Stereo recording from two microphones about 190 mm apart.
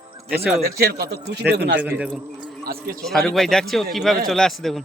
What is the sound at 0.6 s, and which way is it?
Speech, 55° right (ahead or behind).